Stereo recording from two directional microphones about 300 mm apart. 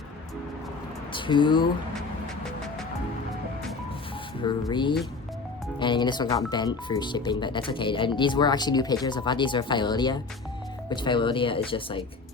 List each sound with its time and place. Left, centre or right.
1.1 s speech: centre
4.4 s speech: centre